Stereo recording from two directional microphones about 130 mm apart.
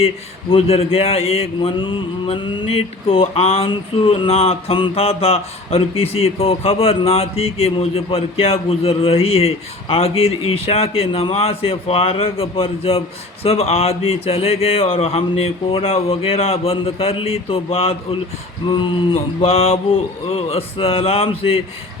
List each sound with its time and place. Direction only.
0.5 s mantra: 45° left (ahead or behind)